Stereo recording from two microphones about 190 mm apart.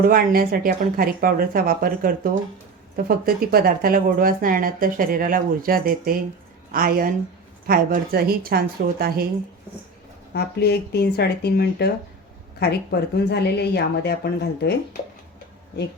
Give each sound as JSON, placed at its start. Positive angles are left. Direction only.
{"t": 0.1, "sound": "a woman's voice", "side_deg": -50}
{"t": 10.3, "sound": "a woman's voice", "side_deg": 60}